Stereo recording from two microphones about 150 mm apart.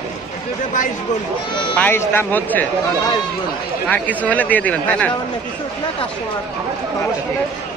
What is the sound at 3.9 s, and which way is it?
Speech, 10° left (ahead or behind).